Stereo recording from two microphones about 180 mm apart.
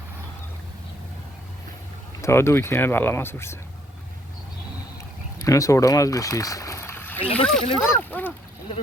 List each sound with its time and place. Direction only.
2.2 s speech: 15° left (ahead or behind)
5.4 s speech: 20° left (ahead or behind)